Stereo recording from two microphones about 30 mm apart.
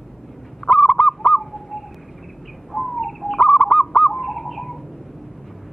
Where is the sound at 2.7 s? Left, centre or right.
Centre.